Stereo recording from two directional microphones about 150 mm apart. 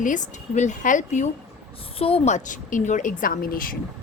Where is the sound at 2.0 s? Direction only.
40° left (ahead or behind).